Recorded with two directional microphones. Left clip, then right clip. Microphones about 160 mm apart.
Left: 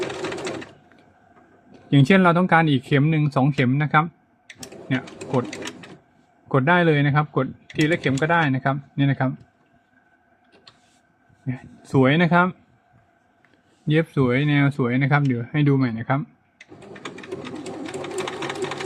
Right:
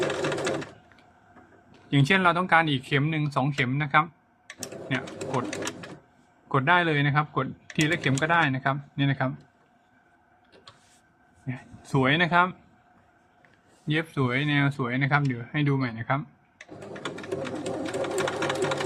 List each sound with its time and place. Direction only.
0.2 s sewing machine: 5° right (ahead or behind)
1.7 s speech: 35° left (ahead or behind)
6.5 s speech: 35° left (ahead or behind)
11.4 s speech: 30° left (ahead or behind)
13.8 s speech: 30° left (ahead or behind)
16.9 s sewing machine: 10° right (ahead or behind)